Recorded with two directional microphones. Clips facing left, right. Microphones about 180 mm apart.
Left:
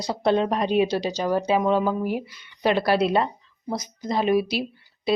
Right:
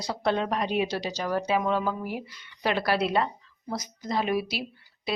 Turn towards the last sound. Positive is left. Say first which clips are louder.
# left 6 dB
turn(degrees=25)  # may be behind; listen again after turning